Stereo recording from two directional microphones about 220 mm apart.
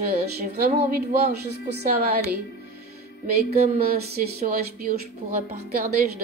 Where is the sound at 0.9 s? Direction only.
45° right (ahead or behind).